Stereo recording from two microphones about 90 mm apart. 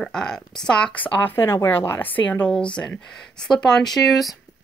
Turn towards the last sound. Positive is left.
turn(degrees=0)  # may be behind; listen again after turning